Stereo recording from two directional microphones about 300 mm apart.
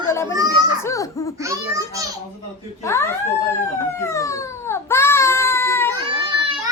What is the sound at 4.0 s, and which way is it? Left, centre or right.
Baby cry, centre.